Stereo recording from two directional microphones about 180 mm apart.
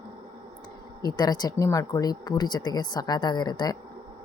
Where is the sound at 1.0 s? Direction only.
20° left (ahead or behind).